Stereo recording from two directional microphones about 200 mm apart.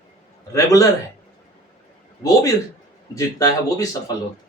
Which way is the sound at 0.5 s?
15° left (ahead or behind).